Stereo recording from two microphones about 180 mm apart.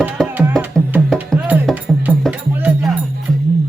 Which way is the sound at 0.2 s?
5° left (ahead or behind).